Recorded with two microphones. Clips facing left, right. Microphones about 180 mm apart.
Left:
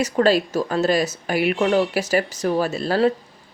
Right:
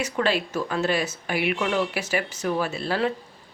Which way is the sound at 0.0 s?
40° left (ahead or behind).